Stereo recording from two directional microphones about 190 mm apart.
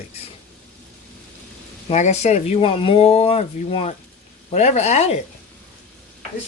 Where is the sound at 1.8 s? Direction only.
35° left (ahead or behind).